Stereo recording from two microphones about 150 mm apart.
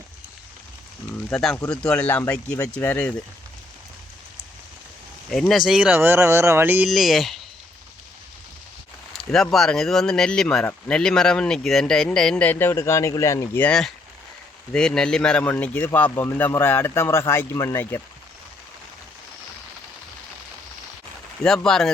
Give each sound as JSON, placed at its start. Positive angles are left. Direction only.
{"t": 1.3, "sound": "speech", "side_deg": 5}
{"t": 1.5, "sound": "speech", "side_deg": 15}
{"t": 5.3, "sound": "speech", "side_deg": 0}
{"t": 6.8, "sound": "speech", "side_deg": 0}
{"t": 9.1, "sound": "speech", "side_deg": 0}
{"t": 21.4, "sound": "speech", "side_deg": 5}